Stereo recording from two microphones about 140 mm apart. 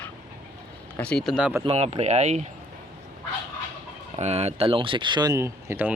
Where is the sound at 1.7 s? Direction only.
50° right (ahead or behind).